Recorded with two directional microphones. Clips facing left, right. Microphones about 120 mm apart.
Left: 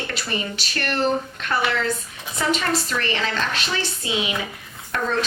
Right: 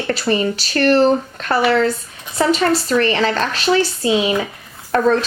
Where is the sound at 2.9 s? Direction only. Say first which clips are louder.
Right 9 dB; 40° right (ahead or behind).